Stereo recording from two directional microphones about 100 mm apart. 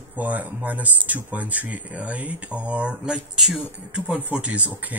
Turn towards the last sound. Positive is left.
turn(degrees=-15)  # may be behind; listen again after turning